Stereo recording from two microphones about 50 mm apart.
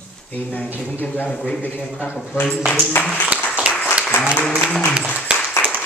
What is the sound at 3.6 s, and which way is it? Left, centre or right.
Applause, right.